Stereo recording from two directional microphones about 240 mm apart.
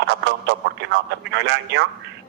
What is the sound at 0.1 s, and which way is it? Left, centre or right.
A man's voice, right.